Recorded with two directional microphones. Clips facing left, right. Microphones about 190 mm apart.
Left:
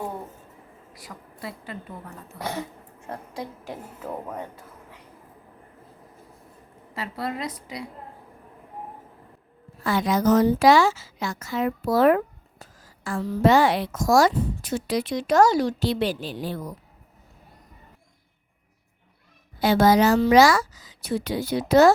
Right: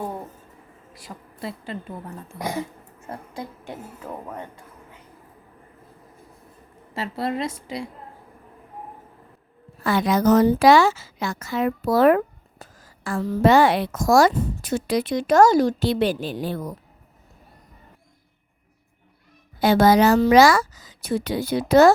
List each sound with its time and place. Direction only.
0.9 s speech: 25° right (ahead or behind)
3.1 s a woman's voice: centre (ahead or behind)
6.9 s speech: 25° right (ahead or behind)
9.8 s a woman's voice: 65° right (ahead or behind)
19.5 s a woman's voice: 55° right (ahead or behind)